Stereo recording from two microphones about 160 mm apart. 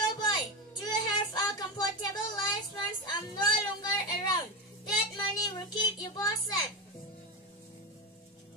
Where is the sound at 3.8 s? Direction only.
25° left (ahead or behind).